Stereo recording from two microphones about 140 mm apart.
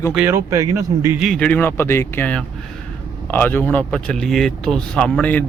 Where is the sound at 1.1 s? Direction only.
Centre (ahead or behind).